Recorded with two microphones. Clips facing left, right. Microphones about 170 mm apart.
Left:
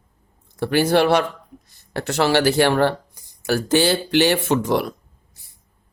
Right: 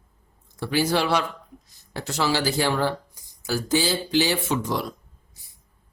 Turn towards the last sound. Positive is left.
turn(degrees=65)  # may be behind; listen again after turning